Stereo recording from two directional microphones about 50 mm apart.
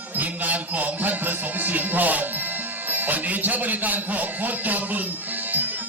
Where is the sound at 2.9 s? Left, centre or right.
Right.